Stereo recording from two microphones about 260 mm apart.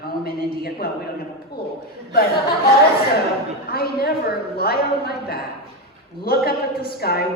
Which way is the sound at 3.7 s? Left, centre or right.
Left.